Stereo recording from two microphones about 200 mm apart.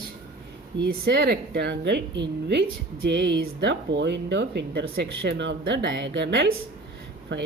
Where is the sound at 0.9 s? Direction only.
55° right (ahead or behind).